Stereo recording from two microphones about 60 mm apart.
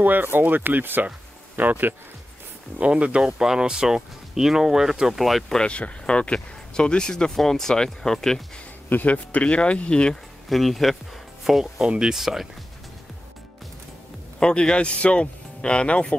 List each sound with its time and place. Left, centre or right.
0.0 s speech: right
2.8 s speech: centre
5.6 s speech: centre
8.8 s speech: left
10.5 s speech: centre
14.4 s speech: centre